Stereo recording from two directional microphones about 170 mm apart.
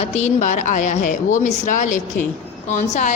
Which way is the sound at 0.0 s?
40° left (ahead or behind).